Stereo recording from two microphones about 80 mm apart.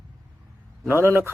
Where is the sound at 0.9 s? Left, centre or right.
Right.